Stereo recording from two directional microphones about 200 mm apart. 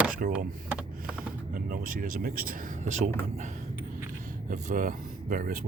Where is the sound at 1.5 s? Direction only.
45° right (ahead or behind).